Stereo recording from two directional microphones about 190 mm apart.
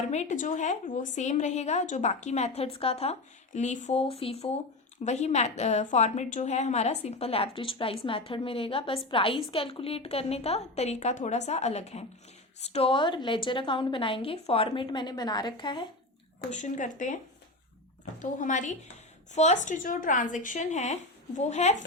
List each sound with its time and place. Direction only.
0.1 s a woman's voice: 40° left (ahead or behind)
16.5 s a woman's voice: 40° left (ahead or behind)
18.2 s a woman's voice: 40° left (ahead or behind)